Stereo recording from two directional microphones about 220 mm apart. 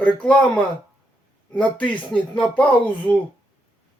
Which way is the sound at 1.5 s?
5° left (ahead or behind).